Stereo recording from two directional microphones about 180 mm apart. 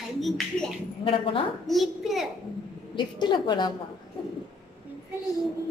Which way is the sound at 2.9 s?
25° left (ahead or behind).